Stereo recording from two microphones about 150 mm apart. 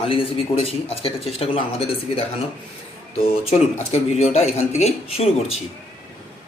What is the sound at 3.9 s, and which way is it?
Speech, 45° left (ahead or behind).